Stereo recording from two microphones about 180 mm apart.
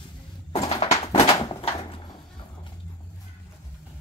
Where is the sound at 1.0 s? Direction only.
35° left (ahead or behind).